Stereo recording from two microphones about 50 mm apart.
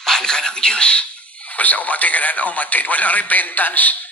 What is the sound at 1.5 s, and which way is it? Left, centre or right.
Speech, left.